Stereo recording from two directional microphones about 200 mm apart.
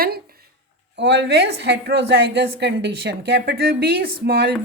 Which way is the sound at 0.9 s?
60° right (ahead or behind).